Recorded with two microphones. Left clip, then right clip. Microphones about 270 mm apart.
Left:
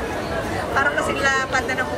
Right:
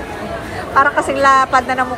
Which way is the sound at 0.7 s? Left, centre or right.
Centre.